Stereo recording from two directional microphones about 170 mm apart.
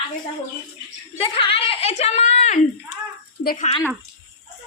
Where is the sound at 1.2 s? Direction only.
35° left (ahead or behind).